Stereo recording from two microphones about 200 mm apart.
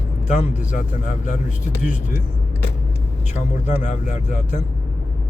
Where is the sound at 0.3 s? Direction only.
40° left (ahead or behind).